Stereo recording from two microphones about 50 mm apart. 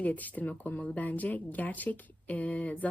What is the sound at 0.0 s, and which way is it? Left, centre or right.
Speech, left.